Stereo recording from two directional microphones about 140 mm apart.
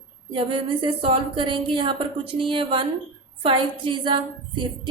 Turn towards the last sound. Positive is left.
turn(degrees=-35)  # may be behind; listen again after turning